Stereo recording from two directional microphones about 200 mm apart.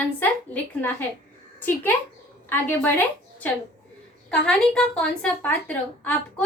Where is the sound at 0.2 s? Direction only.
10° left (ahead or behind).